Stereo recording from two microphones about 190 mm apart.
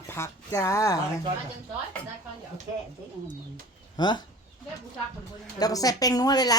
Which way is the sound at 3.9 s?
25° left (ahead or behind).